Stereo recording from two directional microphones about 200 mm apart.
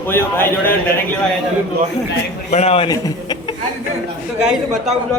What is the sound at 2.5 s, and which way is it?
Speech, 30° left (ahead or behind).